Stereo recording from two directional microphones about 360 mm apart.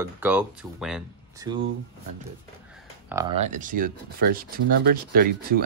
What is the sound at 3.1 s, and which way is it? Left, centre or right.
Speech, centre.